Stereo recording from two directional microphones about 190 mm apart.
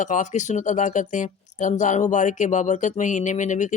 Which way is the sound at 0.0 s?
40° left (ahead or behind).